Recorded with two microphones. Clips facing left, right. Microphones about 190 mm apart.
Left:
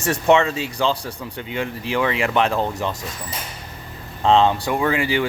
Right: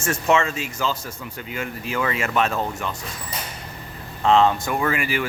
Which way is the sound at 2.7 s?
40° left (ahead or behind).